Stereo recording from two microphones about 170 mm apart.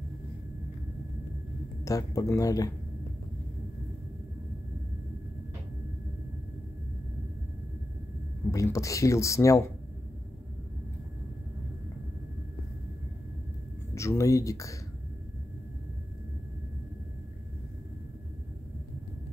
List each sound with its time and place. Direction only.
1.9 s speech: 20° left (ahead or behind)
8.5 s speech: 20° left (ahead or behind)
13.9 s speech: 15° left (ahead or behind)